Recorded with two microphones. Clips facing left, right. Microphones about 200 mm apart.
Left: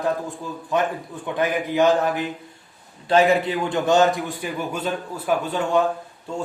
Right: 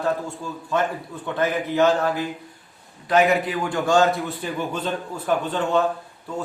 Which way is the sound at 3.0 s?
30° left (ahead or behind).